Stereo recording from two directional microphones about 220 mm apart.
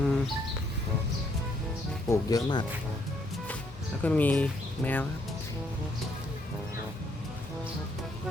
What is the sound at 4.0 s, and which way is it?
Speech, 5° left (ahead or behind).